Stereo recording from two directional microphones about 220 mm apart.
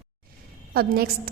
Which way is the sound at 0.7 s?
45° right (ahead or behind).